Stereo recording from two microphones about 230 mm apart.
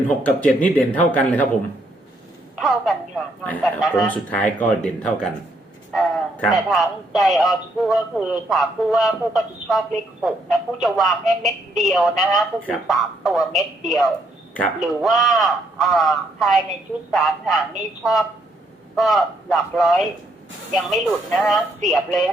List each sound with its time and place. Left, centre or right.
0.2 s speech: centre
2.6 s speech: centre